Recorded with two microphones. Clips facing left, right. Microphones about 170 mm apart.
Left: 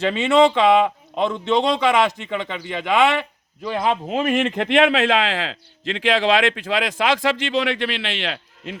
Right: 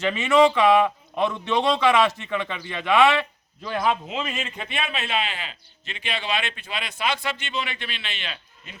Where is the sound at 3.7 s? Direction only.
30° left (ahead or behind).